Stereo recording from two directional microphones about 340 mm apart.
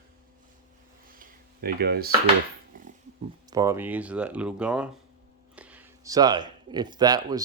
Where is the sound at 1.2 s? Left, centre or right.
Right.